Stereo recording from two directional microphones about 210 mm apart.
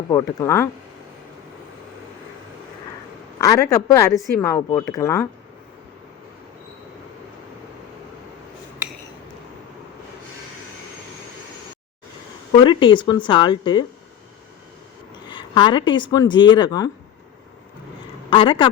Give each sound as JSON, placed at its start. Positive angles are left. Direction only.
{"t": 0.1, "sound": "speech", "side_deg": 15}
{"t": 3.3, "sound": "speech", "side_deg": 15}
{"t": 12.5, "sound": "speech", "side_deg": 20}
{"t": 15.3, "sound": "speech", "side_deg": 25}
{"t": 18.3, "sound": "speech", "side_deg": 25}